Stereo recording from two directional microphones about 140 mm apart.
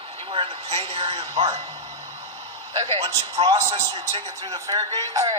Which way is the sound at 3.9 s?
30° right (ahead or behind).